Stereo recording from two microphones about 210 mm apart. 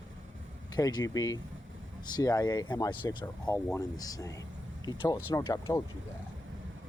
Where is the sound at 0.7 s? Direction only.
15° left (ahead or behind).